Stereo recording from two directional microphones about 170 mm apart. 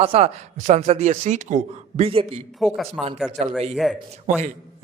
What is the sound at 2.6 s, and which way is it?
Speech, centre (ahead or behind).